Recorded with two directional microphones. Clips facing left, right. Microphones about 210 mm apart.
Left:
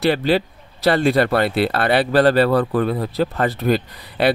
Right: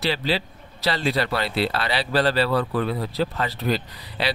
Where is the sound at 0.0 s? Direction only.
55° left (ahead or behind).